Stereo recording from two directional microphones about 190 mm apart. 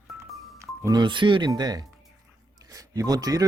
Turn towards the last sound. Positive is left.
turn(degrees=-20)  # may be behind; listen again after turning